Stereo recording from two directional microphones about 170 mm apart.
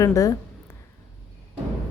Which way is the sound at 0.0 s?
20° left (ahead or behind).